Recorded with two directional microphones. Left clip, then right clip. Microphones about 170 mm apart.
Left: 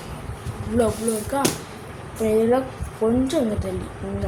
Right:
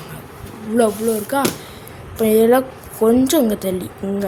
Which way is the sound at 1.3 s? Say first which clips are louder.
Right 3 dB; 65° right (ahead or behind).